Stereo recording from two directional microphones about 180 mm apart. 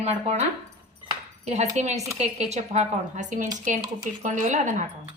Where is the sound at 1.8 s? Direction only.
40° right (ahead or behind).